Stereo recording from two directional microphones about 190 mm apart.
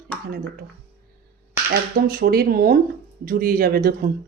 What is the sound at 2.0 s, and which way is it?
Speech, 55° right (ahead or behind).